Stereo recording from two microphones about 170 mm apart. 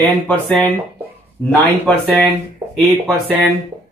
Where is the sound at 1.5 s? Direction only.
5° left (ahead or behind).